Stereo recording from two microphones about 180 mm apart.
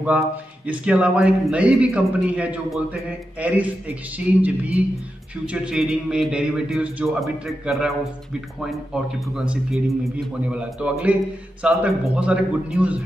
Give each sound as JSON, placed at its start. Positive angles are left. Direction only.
{"t": 0.7, "sound": "a man's voice", "side_deg": -5}